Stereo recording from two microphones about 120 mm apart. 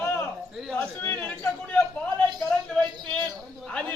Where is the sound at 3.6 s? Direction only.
10° left (ahead or behind).